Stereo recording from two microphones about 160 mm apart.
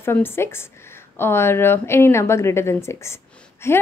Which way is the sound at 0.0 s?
15° left (ahead or behind).